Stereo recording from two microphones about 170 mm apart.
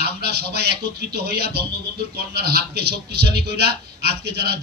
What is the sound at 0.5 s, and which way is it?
A man's voice, 70° right (ahead or behind).